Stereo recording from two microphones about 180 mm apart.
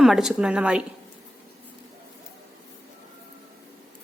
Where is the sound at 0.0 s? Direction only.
Centre (ahead or behind).